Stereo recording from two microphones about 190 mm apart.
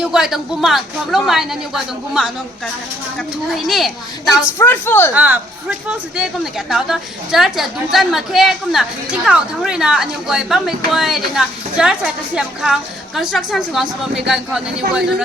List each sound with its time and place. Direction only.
0.0 s a woman's voice: 5° right (ahead or behind)
4.5 s speech: 10° left (ahead or behind)
5.1 s a woman's voice: 10° right (ahead or behind)